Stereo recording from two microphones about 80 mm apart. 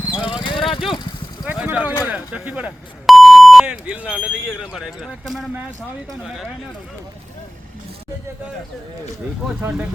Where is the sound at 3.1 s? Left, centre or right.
Centre.